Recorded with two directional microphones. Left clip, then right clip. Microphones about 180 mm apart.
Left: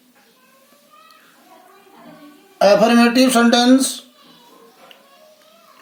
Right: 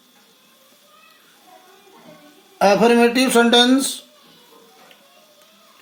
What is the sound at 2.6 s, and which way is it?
Speech, 25° right (ahead or behind).